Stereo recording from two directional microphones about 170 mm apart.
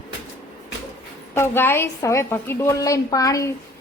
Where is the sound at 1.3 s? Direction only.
15° left (ahead or behind).